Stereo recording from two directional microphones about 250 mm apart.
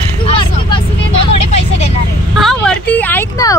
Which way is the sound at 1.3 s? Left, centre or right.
Left.